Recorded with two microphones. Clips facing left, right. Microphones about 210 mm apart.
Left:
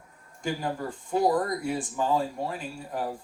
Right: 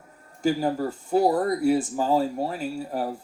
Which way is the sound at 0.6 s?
40° right (ahead or behind).